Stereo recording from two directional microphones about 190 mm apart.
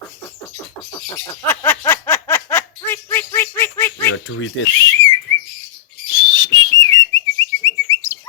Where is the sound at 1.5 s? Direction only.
10° left (ahead or behind).